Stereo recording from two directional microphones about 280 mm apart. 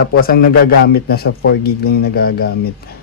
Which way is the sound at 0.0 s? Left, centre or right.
Left.